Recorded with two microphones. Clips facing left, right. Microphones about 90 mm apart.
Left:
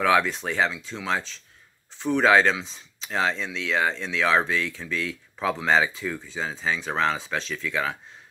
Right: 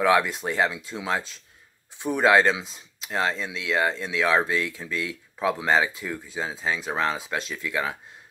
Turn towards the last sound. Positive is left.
turn(degrees=-5)  # may be behind; listen again after turning